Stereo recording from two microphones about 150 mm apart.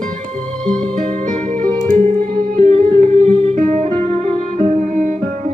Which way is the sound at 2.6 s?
40° right (ahead or behind).